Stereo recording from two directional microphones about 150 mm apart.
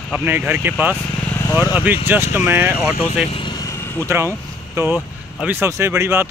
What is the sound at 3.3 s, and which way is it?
Vehicle, 35° left (ahead or behind).